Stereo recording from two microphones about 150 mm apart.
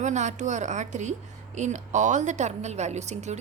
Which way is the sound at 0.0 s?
50° right (ahead or behind).